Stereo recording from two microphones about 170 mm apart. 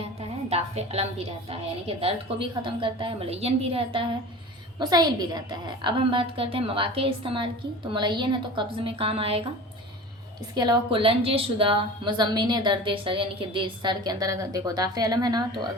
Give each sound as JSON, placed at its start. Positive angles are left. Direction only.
{"t": 0.2, "sound": "music", "side_deg": -40}
{"t": 2.0, "sound": "a woman's voice", "side_deg": -30}
{"t": 4.8, "sound": "a woman's voice", "side_deg": -25}
{"t": 10.5, "sound": "a woman's voice", "side_deg": -25}